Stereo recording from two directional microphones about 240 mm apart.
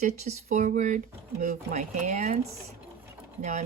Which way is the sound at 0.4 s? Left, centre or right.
Right.